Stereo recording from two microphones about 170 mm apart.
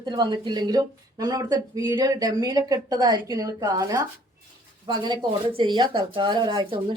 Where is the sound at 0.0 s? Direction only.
25° right (ahead or behind).